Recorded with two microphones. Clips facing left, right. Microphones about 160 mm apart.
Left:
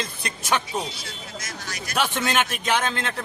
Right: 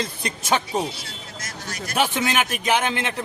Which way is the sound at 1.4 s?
30° right (ahead or behind).